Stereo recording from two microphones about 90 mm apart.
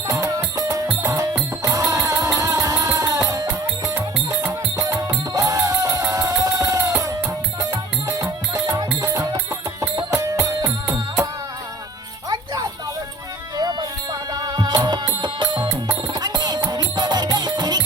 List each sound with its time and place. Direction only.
0.1 s music: 40° right (ahead or behind)
12.3 s music: 45° right (ahead or behind)